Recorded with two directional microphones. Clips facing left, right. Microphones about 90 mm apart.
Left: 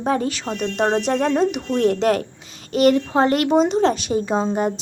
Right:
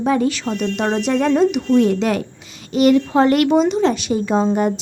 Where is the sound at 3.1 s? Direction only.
30° left (ahead or behind).